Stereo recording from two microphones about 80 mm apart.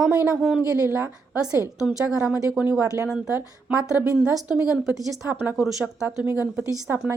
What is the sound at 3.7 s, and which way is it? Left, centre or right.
A woman's voice, centre.